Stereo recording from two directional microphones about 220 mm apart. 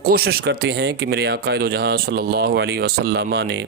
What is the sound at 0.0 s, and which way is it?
Speech, 45° right (ahead or behind).